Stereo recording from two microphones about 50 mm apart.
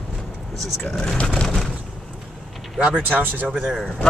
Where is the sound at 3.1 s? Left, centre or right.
Right.